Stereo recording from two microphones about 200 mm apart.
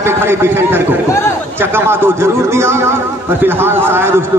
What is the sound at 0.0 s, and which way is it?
Speech, 10° right (ahead or behind).